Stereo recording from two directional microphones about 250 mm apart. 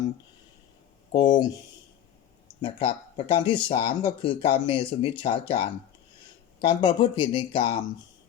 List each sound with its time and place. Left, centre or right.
1.1 s speech: centre
2.6 s speech: left